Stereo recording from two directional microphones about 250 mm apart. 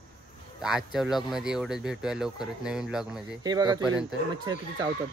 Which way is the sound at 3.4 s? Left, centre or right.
Centre.